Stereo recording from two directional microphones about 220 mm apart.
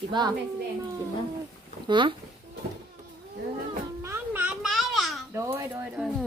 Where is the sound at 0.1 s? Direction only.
20° right (ahead or behind).